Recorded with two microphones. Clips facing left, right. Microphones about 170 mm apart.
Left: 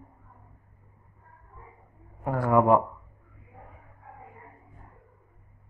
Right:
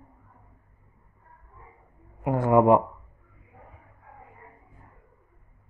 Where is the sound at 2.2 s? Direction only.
20° right (ahead or behind).